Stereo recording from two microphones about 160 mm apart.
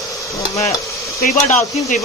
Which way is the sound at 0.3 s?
20° left (ahead or behind).